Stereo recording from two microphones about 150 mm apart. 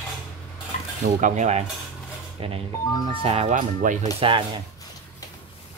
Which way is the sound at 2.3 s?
40° right (ahead or behind).